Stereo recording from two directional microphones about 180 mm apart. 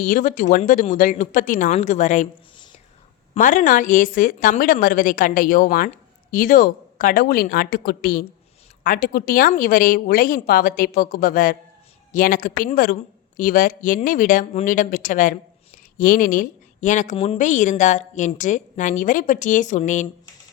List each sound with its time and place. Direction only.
0.0 s a woman's voice: 45° left (ahead or behind)
3.3 s a woman's voice: 45° left (ahead or behind)